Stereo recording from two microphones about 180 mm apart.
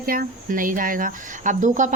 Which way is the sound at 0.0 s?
55° right (ahead or behind).